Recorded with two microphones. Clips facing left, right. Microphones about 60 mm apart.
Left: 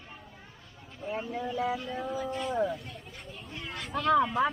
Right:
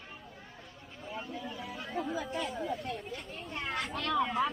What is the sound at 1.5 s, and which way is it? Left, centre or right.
Speech, left.